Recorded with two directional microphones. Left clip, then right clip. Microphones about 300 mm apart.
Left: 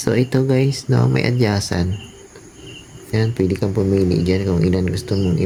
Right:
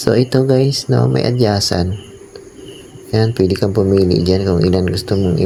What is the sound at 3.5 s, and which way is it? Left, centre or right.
Speech, centre.